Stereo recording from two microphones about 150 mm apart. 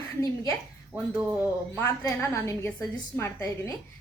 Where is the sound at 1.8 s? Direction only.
20° left (ahead or behind).